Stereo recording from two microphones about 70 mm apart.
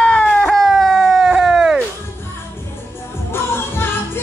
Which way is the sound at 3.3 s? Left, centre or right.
Left.